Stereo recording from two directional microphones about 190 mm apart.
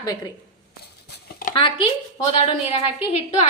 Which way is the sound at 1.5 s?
25° left (ahead or behind).